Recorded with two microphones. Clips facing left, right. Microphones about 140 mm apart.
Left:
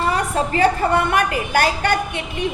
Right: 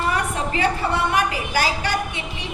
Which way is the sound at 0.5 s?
45° left (ahead or behind).